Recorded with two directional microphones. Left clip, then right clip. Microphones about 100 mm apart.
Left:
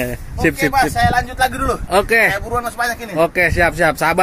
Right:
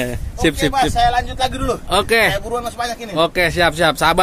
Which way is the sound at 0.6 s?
15° right (ahead or behind).